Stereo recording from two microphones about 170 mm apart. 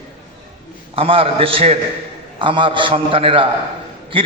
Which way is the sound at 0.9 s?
35° right (ahead or behind).